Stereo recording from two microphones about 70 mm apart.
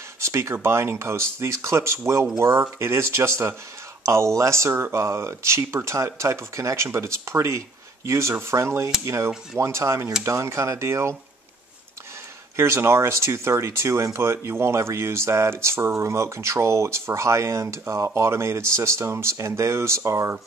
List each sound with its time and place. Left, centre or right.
0.2 s speech: right
12.5 s speech: right